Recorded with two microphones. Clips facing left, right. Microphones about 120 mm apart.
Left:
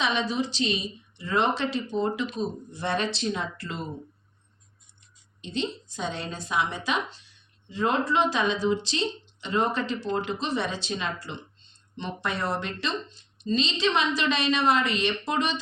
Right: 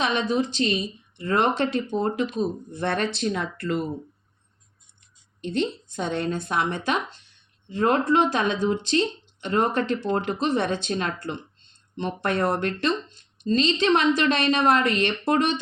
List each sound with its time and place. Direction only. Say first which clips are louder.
0.0 s speech: right 3 dB; 50° right (ahead or behind)
5.4 s a woman's voice: right 5 dB; 55° right (ahead or behind)